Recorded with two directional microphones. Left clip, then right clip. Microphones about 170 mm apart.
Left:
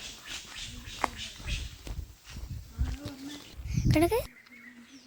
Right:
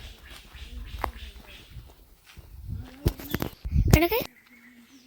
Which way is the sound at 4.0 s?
Centre (ahead or behind).